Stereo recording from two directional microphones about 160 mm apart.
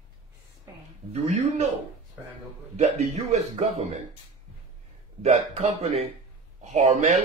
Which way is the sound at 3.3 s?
45° right (ahead or behind).